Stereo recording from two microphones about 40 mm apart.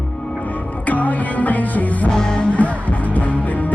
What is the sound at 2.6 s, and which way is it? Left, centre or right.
Music, left.